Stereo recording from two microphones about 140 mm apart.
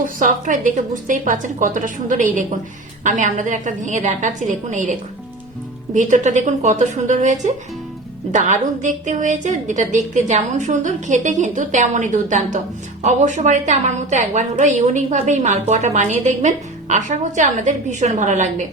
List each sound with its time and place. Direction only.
0.0 s a woman's voice: 65° right (ahead or behind)